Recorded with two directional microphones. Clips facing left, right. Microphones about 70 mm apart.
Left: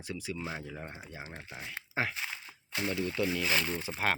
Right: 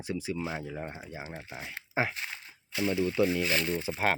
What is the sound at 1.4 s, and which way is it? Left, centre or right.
Speech, centre.